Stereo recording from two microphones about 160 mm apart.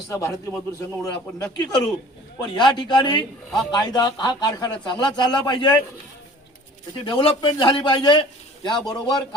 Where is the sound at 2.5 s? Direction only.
30° left (ahead or behind).